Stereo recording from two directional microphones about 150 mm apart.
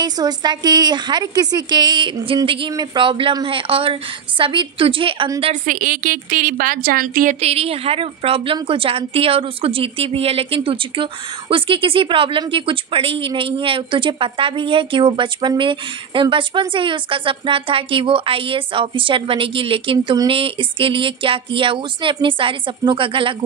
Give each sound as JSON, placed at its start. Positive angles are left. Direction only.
{"t": 0.0, "sound": "a woman's voice", "side_deg": -30}
{"t": 5.5, "sound": "a woman's voice", "side_deg": -60}
{"t": 7.3, "sound": "a woman's voice", "side_deg": -40}